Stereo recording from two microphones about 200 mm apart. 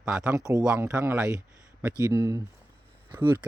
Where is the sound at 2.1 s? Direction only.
20° right (ahead or behind).